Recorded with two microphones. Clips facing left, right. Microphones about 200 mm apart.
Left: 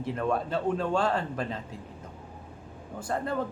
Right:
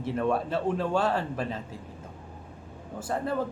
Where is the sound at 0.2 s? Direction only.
5° right (ahead or behind).